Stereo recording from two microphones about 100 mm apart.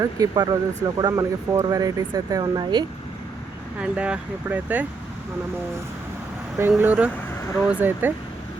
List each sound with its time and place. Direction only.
0.0 s speech: 40° right (ahead or behind)
3.8 s speech: 10° right (ahead or behind)
6.6 s speech: 20° right (ahead or behind)